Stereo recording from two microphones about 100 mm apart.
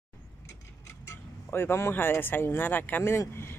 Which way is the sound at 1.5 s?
25° left (ahead or behind).